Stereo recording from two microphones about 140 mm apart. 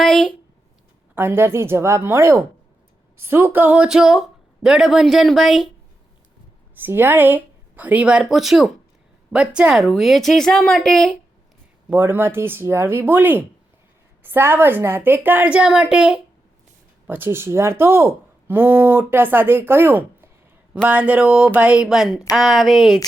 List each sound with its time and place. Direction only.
0.0 s speech: centre (ahead or behind)
1.1 s speech: 15° right (ahead or behind)
6.7 s speech: 15° right (ahead or behind); by 11.1 s 5° left (ahead or behind)
11.9 s speech: 15° right (ahead or behind)
17.1 s speech: 15° right (ahead or behind); by 23.0 s centre (ahead or behind)